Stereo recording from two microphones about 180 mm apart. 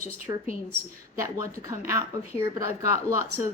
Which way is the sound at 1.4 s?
15° right (ahead or behind).